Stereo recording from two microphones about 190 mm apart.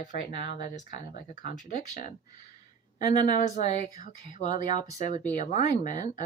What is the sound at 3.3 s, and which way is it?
Speech, 40° left (ahead or behind).